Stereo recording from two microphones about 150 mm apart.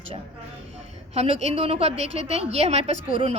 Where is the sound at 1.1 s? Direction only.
45° right (ahead or behind).